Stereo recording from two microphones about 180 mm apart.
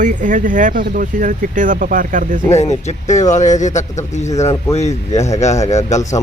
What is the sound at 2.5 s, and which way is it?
A man's voice, 40° left (ahead or behind).